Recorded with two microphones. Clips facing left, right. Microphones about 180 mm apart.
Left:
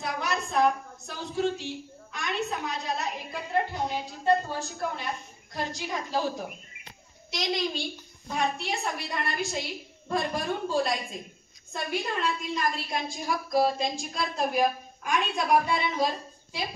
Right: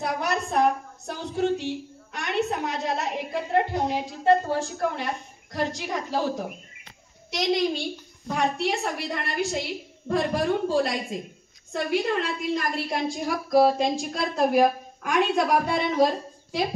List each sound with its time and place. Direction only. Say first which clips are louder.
0.0 s a sound: right 4 dB; 55° right (ahead or behind)
2.1 s a woman's voice: right 5 dB; 65° right (ahead or behind)
7.2 s a woman's voice: right 6 dB; 65° right (ahead or behind)